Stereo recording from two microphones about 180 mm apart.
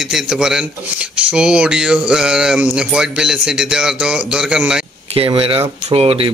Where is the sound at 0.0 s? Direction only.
Centre (ahead or behind).